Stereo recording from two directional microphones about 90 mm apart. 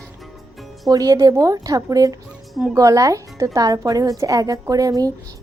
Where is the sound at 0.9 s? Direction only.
40° right (ahead or behind).